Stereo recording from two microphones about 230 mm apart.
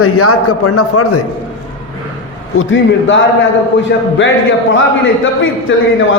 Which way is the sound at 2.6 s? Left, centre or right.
Left.